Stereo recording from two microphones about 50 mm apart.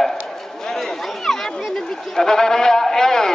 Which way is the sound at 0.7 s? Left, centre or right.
Centre.